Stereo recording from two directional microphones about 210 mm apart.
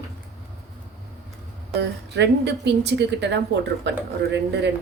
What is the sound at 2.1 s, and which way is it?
A woman's voice, 55° right (ahead or behind).